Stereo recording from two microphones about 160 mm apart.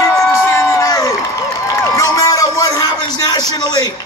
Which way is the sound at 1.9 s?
20° left (ahead or behind).